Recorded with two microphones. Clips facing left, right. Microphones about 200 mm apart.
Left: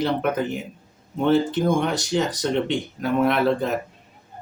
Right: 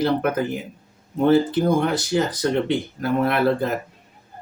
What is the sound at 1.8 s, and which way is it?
Speech, centre (ahead or behind).